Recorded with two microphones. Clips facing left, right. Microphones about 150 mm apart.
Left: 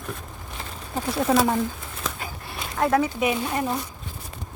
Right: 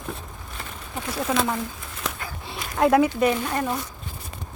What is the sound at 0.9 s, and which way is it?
Speech, 35° left (ahead or behind).